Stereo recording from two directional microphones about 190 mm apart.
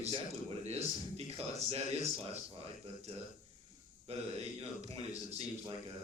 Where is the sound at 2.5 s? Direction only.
30° right (ahead or behind).